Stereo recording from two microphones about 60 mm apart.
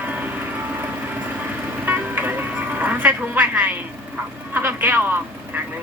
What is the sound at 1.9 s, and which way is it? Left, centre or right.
Music, right.